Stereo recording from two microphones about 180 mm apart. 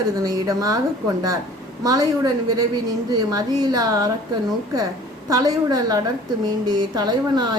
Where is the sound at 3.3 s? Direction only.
20° right (ahead or behind).